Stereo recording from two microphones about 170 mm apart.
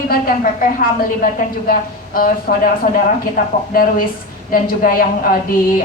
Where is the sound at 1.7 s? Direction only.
55° left (ahead or behind).